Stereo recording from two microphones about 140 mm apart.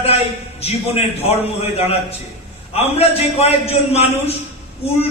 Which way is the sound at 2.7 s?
45° left (ahead or behind).